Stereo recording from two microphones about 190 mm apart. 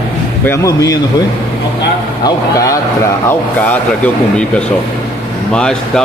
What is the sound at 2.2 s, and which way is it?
A man's voice, 15° left (ahead or behind).